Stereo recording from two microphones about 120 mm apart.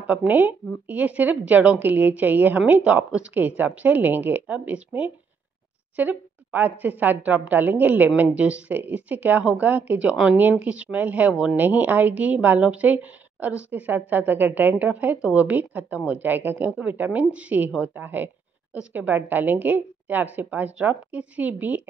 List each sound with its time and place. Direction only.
0.0 s speech: 15° right (ahead or behind)